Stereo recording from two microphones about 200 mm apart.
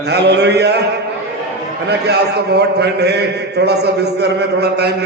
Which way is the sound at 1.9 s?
55° right (ahead or behind).